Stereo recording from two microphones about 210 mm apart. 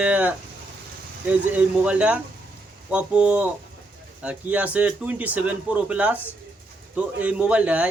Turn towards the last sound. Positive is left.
turn(degrees=-5)  # may be behind; listen again after turning